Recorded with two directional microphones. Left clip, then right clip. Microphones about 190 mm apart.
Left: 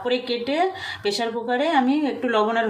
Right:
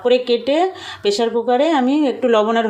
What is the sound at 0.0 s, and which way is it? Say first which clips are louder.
Speech: right 9 dB; 35° right (ahead or behind).